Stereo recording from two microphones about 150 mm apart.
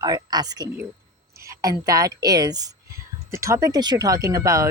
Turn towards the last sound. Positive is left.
turn(degrees=-20)  # may be behind; listen again after turning